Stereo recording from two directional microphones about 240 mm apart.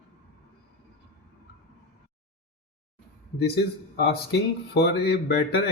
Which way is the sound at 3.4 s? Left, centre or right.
Left.